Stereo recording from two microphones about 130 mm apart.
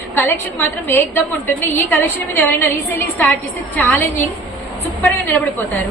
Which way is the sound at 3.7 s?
15° left (ahead or behind).